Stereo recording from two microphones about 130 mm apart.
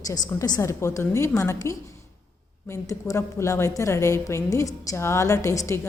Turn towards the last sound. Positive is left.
turn(degrees=25)  # may be behind; listen again after turning